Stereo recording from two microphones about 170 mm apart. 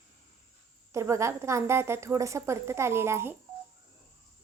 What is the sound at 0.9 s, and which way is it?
A woman's voice, 15° right (ahead or behind).